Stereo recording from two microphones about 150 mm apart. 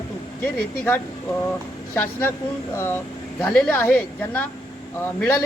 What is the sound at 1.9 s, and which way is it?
Speech, 15° left (ahead or behind).